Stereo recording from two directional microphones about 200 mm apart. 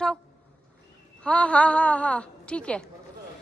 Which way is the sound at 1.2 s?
5° left (ahead or behind).